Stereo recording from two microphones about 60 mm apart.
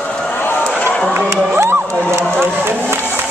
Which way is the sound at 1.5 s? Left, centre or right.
Right.